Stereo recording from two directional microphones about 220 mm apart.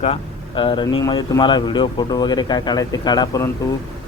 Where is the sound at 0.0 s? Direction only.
25° left (ahead or behind).